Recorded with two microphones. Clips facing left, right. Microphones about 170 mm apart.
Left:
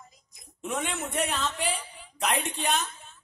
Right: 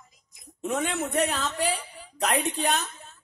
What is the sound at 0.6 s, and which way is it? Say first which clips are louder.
Speech: right 4 dB; 40° right (ahead or behind).